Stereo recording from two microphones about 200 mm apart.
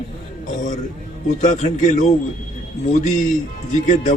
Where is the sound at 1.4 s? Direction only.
35° left (ahead or behind).